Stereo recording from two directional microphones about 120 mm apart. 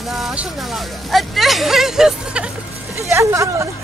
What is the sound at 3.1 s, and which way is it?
Speech, 25° right (ahead or behind).